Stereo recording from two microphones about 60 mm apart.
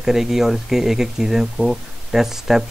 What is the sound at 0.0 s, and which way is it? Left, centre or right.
Speech, centre.